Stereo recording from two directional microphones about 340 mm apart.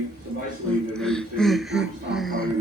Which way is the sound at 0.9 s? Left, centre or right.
Centre.